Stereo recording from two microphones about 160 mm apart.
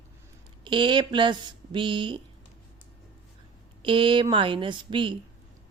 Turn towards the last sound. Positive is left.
turn(degrees=-30)  # may be behind; listen again after turning